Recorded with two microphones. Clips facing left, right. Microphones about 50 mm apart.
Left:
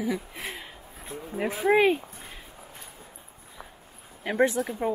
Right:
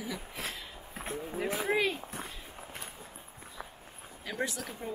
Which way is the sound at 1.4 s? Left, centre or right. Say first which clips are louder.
Left 8 dB; left.